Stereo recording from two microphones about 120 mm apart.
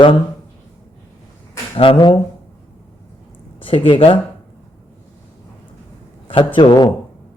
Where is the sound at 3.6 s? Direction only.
45° left (ahead or behind).